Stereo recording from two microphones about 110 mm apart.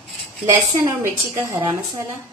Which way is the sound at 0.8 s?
25° right (ahead or behind).